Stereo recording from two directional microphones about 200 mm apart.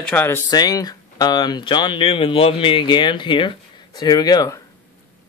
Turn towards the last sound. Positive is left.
turn(degrees=20)  # may be behind; listen again after turning